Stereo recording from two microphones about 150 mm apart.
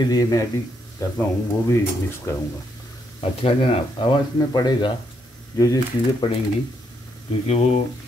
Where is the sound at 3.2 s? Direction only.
40° left (ahead or behind).